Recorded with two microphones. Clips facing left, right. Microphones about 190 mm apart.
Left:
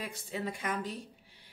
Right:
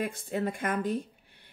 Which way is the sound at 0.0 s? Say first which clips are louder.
Right 7 dB; 50° right (ahead or behind).